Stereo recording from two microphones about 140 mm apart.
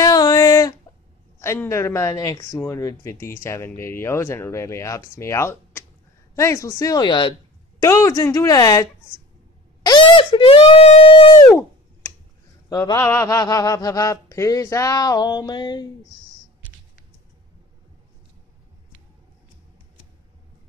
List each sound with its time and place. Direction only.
0.0 s a sound: 25° left (ahead or behind)
1.4 s speech: 20° left (ahead or behind)
7.8 s speech: 25° left (ahead or behind)
9.8 s speech: 35° left (ahead or behind)
11.4 s a sound: 15° left (ahead or behind)
13.0 s speech: 20° left (ahead or behind)